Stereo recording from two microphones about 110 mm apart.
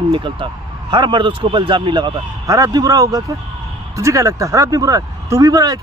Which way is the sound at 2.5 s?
35° right (ahead or behind).